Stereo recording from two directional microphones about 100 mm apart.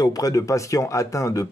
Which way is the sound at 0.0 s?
35° left (ahead or behind).